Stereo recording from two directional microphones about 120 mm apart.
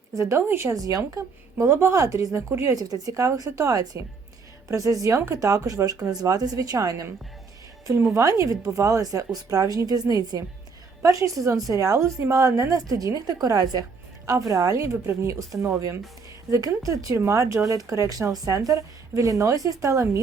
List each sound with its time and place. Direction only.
0.1 s speech: 25° right (ahead or behind)